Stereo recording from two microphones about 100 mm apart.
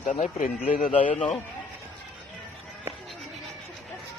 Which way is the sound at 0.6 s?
70° left (ahead or behind).